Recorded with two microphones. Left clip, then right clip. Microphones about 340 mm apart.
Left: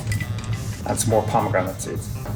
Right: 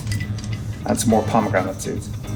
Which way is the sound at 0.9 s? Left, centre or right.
Centre.